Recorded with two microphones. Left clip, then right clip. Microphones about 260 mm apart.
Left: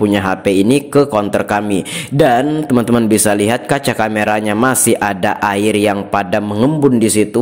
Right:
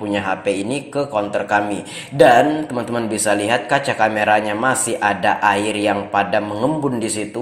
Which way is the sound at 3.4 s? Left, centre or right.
Left.